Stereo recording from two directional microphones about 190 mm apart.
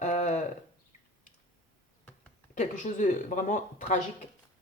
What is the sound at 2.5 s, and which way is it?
Speech, 40° left (ahead or behind).